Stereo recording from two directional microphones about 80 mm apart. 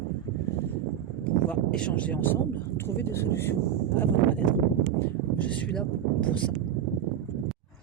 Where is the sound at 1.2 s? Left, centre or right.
Centre.